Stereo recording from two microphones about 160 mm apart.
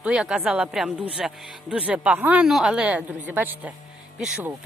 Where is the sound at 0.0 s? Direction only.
5° right (ahead or behind).